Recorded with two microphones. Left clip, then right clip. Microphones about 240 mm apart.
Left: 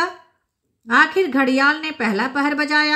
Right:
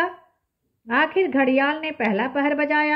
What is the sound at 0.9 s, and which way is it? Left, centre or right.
A woman's voice, centre.